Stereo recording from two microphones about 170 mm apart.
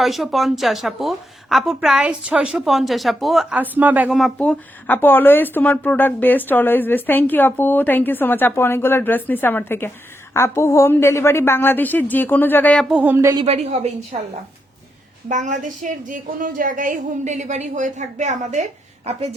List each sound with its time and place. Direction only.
0.0 s a woman's voice: centre (ahead or behind)
12.9 s a woman's voice: 10° right (ahead or behind)
13.3 s a woman's voice: 35° right (ahead or behind)
15.3 s a woman's voice: 45° right (ahead or behind)